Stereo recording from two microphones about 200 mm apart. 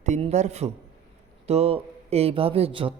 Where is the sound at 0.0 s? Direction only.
35° right (ahead or behind).